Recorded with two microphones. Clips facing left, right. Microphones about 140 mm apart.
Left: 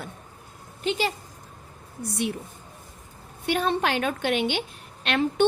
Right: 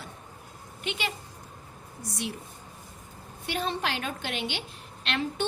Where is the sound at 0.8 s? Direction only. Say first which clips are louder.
Left 8 dB; 35° left (ahead or behind).